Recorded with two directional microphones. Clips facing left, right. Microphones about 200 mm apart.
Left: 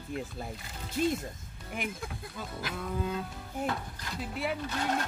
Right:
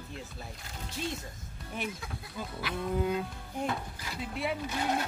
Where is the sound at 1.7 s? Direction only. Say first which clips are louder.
Even; 10° left (ahead or behind).